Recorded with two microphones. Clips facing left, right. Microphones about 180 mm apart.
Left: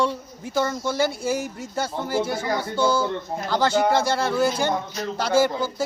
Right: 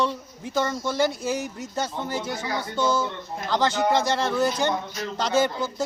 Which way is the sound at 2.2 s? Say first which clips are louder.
Left 4 dB; 20° right (ahead or behind).